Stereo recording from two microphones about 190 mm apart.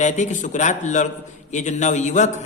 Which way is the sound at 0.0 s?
40° left (ahead or behind).